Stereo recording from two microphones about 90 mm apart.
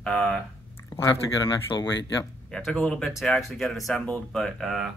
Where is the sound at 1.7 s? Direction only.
65° left (ahead or behind).